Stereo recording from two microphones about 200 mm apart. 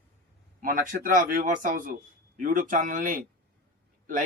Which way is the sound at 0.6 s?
45° right (ahead or behind).